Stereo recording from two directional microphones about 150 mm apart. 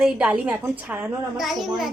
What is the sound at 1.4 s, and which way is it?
Speech, centre (ahead or behind).